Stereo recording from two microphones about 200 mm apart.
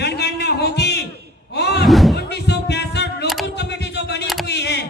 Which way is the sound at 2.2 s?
55° left (ahead or behind).